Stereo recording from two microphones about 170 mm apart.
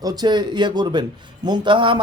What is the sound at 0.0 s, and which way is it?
A man's voice, 25° right (ahead or behind).